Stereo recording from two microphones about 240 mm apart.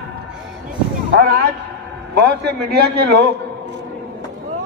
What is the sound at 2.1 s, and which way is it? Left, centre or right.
A man's voice, right.